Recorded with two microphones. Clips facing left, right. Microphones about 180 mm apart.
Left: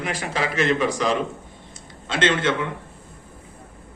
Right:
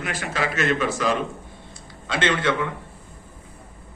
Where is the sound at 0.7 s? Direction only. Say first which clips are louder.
Left 1 dB; 15° left (ahead or behind).